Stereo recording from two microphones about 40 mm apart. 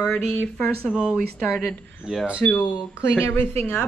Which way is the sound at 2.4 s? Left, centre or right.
Left.